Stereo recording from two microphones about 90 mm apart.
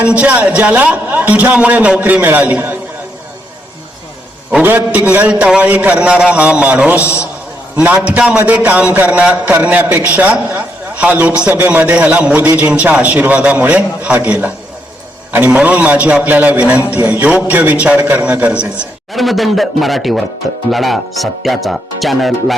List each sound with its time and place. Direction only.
0.0 s a man's voice: 15° right (ahead or behind)
4.6 s a man's voice: 20° right (ahead or behind)
19.1 s speech: centre (ahead or behind)